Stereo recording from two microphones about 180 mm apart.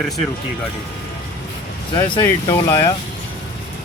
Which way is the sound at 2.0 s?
25° left (ahead or behind).